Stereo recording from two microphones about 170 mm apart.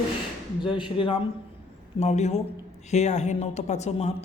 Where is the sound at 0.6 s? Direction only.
30° left (ahead or behind).